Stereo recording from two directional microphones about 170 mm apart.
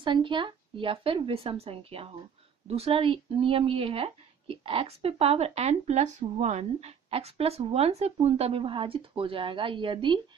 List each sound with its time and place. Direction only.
0.0 s speech: 30° right (ahead or behind)